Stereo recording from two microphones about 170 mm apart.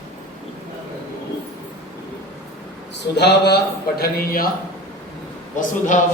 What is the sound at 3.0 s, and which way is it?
A man's voice, 75° left (ahead or behind).